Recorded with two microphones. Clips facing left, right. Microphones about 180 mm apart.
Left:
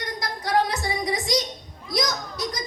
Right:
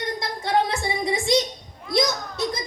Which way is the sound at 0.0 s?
25° right (ahead or behind).